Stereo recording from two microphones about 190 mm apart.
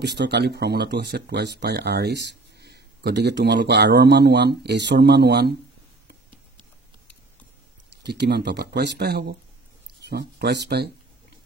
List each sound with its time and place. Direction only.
0.0 s speech: 60° right (ahead or behind)
8.0 s speech: 60° right (ahead or behind)